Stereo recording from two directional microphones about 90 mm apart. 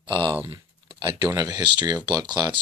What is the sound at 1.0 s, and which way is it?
Speech, 55° right (ahead or behind).